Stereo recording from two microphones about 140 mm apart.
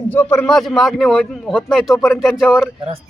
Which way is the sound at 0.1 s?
10° left (ahead or behind).